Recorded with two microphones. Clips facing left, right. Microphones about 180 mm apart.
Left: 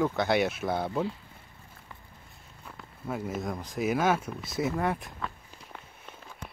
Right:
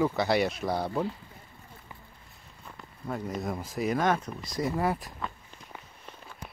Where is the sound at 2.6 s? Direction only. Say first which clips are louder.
Even; 5° left (ahead or behind).